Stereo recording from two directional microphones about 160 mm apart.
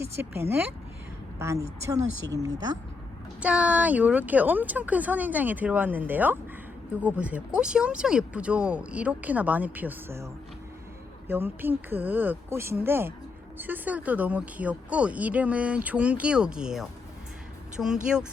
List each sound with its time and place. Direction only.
0.0 s speech: 15° right (ahead or behind)
3.4 s speech: 5° right (ahead or behind)
11.3 s speech: 15° right (ahead or behind)